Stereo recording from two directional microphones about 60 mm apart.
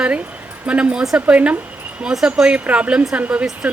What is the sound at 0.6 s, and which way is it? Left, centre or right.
Speech, right.